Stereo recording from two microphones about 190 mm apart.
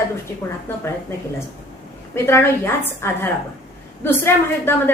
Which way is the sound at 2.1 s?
15° left (ahead or behind).